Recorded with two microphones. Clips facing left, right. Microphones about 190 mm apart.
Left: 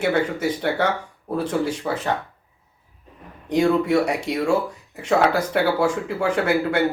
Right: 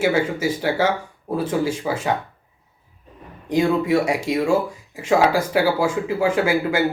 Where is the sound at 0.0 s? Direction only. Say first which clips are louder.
Right 1 dB; 5° right (ahead or behind).